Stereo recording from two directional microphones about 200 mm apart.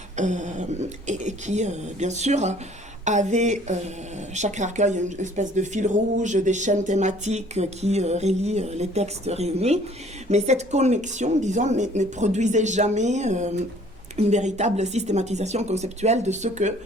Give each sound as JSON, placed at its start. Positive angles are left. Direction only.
{"t": 0.2, "sound": "a woman's voice", "side_deg": -35}